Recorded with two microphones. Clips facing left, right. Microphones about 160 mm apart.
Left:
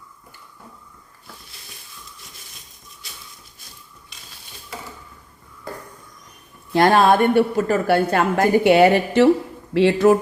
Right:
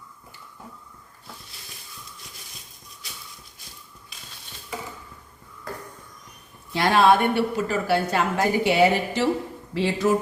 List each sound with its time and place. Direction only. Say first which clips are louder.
4.1 s stir: right 1 dB; centre (ahead or behind)
6.7 s a woman's voice: left 4 dB; 45° left (ahead or behind); by 10.2 s 65° left (ahead or behind)